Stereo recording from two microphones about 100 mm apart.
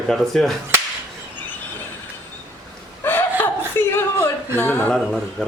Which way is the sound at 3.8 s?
25° left (ahead or behind).